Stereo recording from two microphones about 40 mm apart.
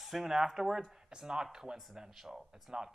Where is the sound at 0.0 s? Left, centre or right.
Centre.